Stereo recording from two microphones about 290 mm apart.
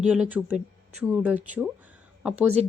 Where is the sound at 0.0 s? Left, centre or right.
Centre.